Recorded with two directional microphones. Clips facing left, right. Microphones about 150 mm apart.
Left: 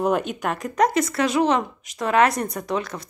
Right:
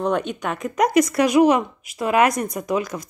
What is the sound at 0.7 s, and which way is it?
Speech, 15° right (ahead or behind).